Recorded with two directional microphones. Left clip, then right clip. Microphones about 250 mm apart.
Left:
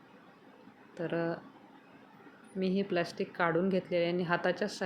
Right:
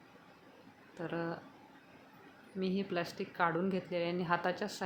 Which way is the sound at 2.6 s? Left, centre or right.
Centre.